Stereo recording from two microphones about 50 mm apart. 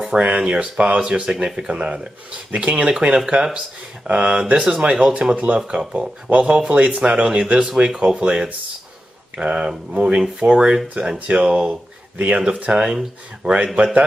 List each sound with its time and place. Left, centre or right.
0.2 s speech: right
1.3 s speech: centre
5.3 s speech: right